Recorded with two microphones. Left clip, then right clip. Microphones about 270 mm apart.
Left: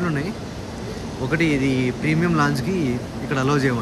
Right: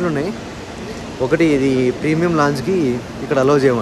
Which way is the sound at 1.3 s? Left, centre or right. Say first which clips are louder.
Right 6 dB; centre.